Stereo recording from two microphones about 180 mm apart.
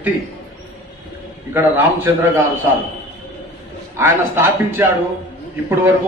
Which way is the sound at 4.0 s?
10° right (ahead or behind).